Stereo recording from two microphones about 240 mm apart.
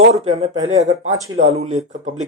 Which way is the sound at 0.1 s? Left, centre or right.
Right.